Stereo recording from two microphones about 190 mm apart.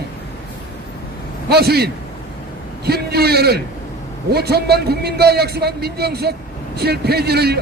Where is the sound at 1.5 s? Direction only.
55° right (ahead or behind).